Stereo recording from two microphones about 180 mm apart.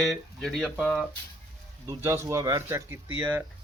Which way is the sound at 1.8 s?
15° right (ahead or behind).